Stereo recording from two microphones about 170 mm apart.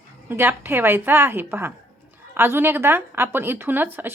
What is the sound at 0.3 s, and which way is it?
Speech, 15° right (ahead or behind).